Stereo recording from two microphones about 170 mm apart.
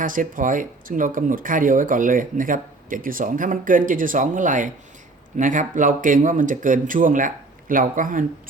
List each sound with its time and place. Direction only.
0.0 s speech: 50° right (ahead or behind)